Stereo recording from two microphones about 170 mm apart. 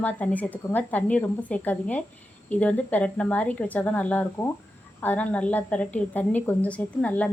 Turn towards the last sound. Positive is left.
turn(degrees=10)  # may be behind; listen again after turning